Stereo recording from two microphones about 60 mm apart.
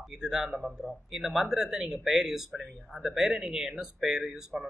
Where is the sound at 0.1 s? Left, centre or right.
Centre.